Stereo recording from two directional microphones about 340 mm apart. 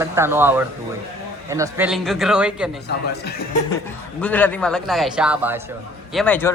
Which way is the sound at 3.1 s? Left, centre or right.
Left.